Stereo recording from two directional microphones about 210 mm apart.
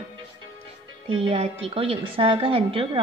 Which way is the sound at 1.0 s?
25° right (ahead or behind).